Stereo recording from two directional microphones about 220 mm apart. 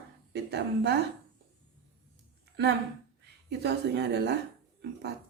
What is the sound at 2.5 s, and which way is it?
Speech, 50° right (ahead or behind).